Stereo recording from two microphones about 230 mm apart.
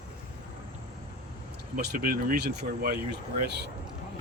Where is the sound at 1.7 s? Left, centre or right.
Right.